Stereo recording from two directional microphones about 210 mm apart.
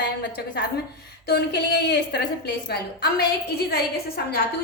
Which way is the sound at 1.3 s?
50° left (ahead or behind).